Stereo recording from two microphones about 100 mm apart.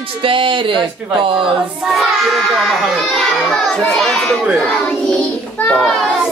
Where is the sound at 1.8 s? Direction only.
Centre (ahead or behind).